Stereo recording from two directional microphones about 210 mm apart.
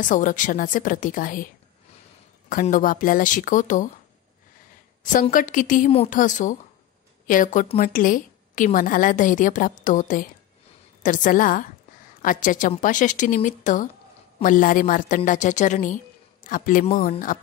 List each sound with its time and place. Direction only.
0.0 s a woman's voice: 40° left (ahead or behind)
2.5 s a woman's voice: 40° left (ahead or behind)
5.1 s a woman's voice: 40° left (ahead or behind)